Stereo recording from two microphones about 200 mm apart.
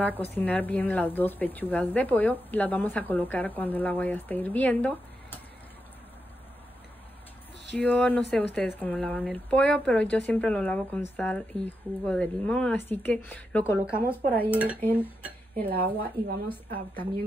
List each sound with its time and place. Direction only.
0.4 s speech: 10° left (ahead or behind)
7.7 s speech: 5° left (ahead or behind)
15.6 s speech: 45° right (ahead or behind)